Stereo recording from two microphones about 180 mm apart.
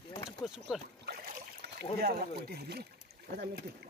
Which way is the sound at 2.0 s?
60° right (ahead or behind).